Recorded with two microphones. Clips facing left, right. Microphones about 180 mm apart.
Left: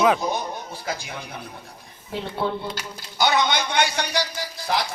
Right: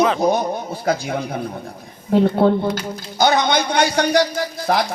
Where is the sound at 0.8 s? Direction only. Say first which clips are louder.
Right 14 dB; 55° right (ahead or behind).